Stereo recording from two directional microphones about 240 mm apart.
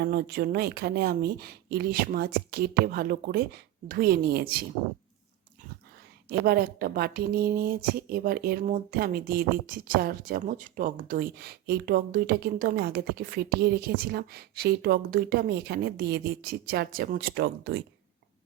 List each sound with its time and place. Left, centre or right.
0.0 s speech: right
6.2 s speech: right